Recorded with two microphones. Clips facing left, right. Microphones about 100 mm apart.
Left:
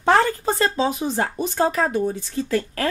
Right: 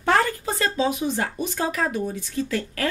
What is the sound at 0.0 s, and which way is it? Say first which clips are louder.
Speech: left 3 dB; 25° left (ahead or behind).